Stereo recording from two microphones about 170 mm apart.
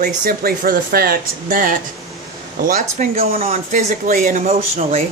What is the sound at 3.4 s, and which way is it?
Speech, 45° right (ahead or behind).